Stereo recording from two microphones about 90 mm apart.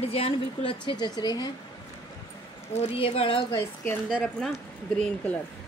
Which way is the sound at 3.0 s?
85° left.